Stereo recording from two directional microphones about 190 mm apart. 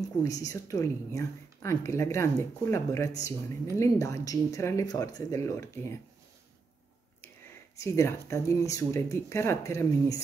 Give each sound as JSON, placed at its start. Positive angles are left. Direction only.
{"t": 0.2, "sound": "speech", "side_deg": 20}
{"t": 7.7, "sound": "speech", "side_deg": 15}